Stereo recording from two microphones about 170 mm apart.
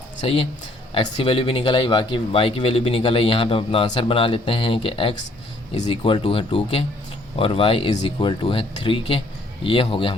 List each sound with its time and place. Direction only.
0.2 s speech: 35° left (ahead or behind)
5.7 s speech: 40° left (ahead or behind)
6.0 s speech: 30° left (ahead or behind)